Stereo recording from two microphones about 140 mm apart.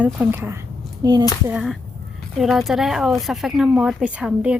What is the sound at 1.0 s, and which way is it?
Speech, 25° right (ahead or behind).